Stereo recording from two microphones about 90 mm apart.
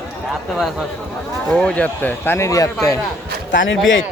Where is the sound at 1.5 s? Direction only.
10° left (ahead or behind).